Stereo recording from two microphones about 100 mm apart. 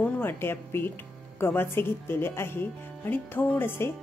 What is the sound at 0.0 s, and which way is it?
Speech, 20° left (ahead or behind).